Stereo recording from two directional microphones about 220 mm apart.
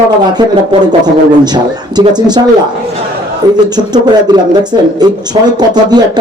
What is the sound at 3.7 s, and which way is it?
Speech, 20° right (ahead or behind).